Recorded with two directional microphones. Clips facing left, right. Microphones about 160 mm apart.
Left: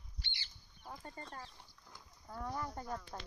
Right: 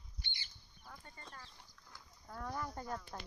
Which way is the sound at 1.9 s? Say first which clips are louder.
Left 2 dB; 10° left (ahead or behind).